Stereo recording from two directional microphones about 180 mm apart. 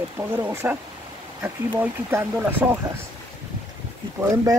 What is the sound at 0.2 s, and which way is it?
Speech, 10° right (ahead or behind).